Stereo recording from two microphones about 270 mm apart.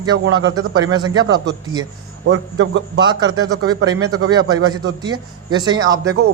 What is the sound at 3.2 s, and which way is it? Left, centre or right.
A man's voice, right.